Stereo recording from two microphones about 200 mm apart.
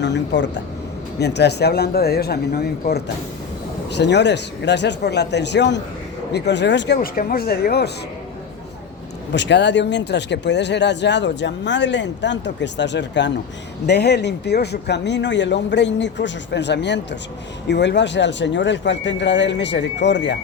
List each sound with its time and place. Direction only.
0.0 s speech: 60° left (ahead or behind)
9.3 s speech: 60° left (ahead or behind)